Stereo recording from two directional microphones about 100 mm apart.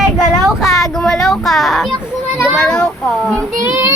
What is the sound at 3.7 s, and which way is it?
Child singing, 25° right (ahead or behind).